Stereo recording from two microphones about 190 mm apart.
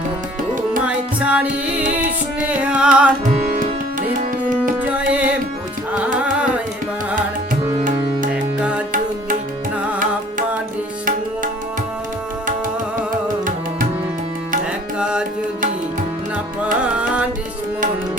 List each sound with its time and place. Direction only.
0.8 s music: 5° right (ahead or behind)
1.8 s music: 45° right (ahead or behind)
2.4 s music: 5° right (ahead or behind)
4.1 s tabla: 45° right (ahead or behind)
4.8 s music: 5° right (ahead or behind)
6.1 s carnatic music: 5° right (ahead or behind)
8.3 s music: 5° right (ahead or behind)
14.9 s carnatic music: 5° right (ahead or behind)
16.8 s music: 5° right (ahead or behind)